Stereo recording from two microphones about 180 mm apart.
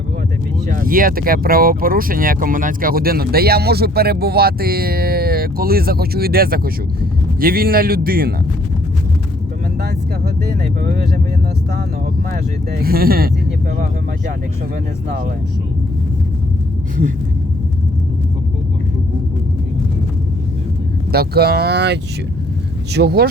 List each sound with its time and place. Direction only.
0.7 s speech: 50° right (ahead or behind)
10.5 s speech: 45° right (ahead or behind)
12.3 s speech: 55° right (ahead or behind)
21.1 s speech: 60° right (ahead or behind)
23.0 s speech: 65° right (ahead or behind)